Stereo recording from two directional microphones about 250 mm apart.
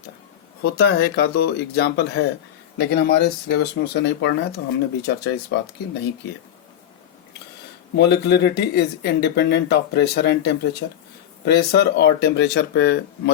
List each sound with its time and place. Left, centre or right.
0.6 s speech: left
7.9 s speech: left